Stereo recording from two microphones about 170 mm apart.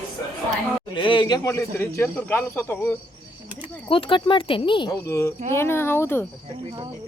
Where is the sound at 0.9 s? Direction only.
30° left (ahead or behind); by 2.9 s 10° left (ahead or behind).